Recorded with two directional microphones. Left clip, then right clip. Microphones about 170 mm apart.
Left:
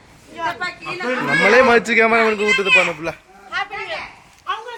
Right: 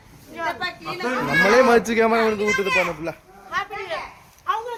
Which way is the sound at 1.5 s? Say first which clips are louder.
Left 4 dB; 10° right (ahead or behind).